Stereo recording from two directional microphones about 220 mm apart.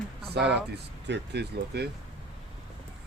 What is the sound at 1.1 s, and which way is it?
Speech, 50° right (ahead or behind).